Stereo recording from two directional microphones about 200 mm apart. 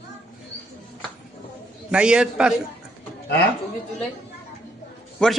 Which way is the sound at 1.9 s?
5° right (ahead or behind).